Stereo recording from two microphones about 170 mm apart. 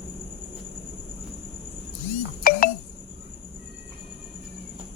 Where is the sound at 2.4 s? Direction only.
60° left (ahead or behind).